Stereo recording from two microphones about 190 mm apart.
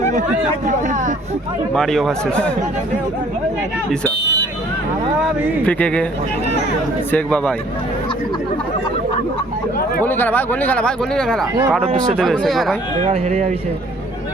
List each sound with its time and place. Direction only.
0.6 s speech: 40° right (ahead or behind)
1.7 s speech: centre (ahead or behind)
5.6 s speech: 5° left (ahead or behind)
7.1 s speech: 5° left (ahead or behind)
10.0 s speech: 10° left (ahead or behind)
13.1 s speech: 35° right (ahead or behind)